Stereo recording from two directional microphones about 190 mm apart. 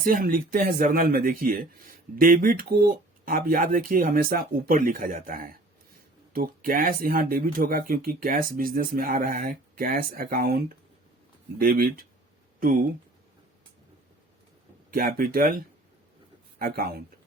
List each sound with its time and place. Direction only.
0.0 s speech: 45° right (ahead or behind)
12.5 s a sound: 45° right (ahead or behind)
14.8 s speech: 50° right (ahead or behind)